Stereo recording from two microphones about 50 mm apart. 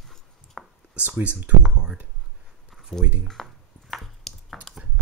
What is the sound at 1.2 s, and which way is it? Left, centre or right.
Speech, right.